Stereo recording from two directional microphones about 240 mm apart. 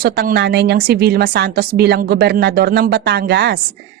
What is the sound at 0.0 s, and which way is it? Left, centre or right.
A woman's voice, right.